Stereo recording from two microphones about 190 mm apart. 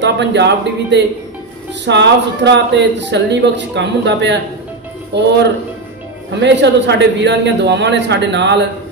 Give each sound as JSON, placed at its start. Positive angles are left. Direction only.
{"t": 0.0, "sound": "a man's voice", "side_deg": -65}
{"t": 6.4, "sound": "a man's voice", "side_deg": -65}